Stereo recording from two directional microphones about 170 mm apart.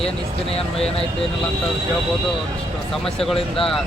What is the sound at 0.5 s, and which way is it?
Speech, 35° left (ahead or behind).